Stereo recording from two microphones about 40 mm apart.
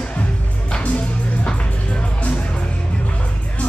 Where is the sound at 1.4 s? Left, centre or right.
Left.